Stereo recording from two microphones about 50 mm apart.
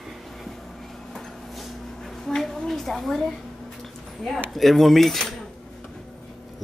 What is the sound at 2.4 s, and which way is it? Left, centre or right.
Speech, centre.